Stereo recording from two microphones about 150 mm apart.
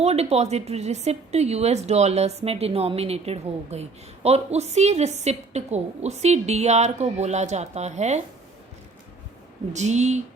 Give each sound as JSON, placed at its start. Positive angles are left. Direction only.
{"t": 0.0, "sound": "speech", "side_deg": -45}
{"t": 9.7, "sound": "speech", "side_deg": -50}